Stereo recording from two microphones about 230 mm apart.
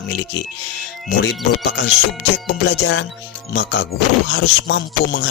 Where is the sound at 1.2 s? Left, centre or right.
Left.